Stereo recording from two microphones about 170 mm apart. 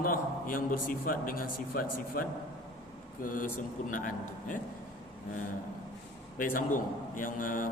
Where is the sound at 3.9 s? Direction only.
50° left (ahead or behind).